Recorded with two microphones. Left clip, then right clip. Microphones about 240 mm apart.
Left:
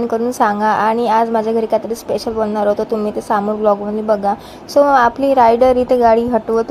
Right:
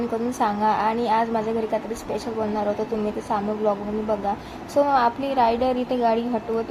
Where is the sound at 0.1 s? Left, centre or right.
Left.